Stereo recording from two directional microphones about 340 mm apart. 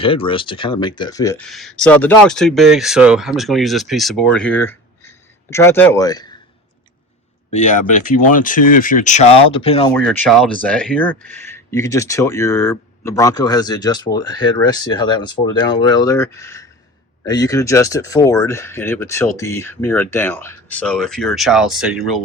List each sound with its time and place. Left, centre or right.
0.0 s speech: centre
7.5 s speech: left
9.9 s speech: centre